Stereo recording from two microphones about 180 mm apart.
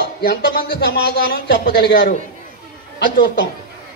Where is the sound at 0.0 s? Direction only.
60° left (ahead or behind).